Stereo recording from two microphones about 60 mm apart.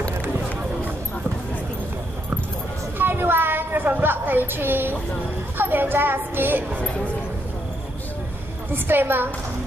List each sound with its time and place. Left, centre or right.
3.0 s a sound: right
5.6 s a woman's voice: right
8.7 s a woman's voice: right